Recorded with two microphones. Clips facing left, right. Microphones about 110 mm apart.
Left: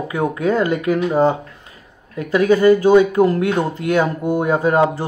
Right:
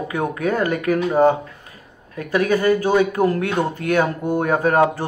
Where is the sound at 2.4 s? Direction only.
30° left (ahead or behind).